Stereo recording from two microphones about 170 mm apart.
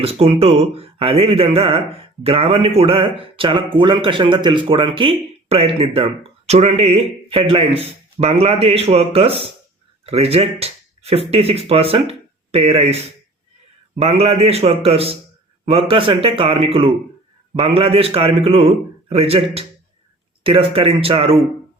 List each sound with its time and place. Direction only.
0.0 s a man's voice: 35° right (ahead or behind)
14.0 s a man's voice: 35° right (ahead or behind)